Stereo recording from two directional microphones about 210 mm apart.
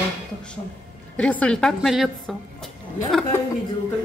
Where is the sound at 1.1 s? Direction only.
5° left (ahead or behind).